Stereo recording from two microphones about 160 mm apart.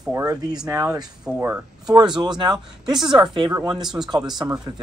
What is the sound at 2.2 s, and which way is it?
Speech, 25° right (ahead or behind).